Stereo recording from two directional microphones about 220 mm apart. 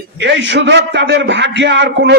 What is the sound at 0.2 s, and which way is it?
A man's voice, 55° right (ahead or behind).